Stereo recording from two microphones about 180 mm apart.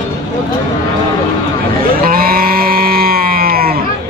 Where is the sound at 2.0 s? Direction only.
55° right (ahead or behind).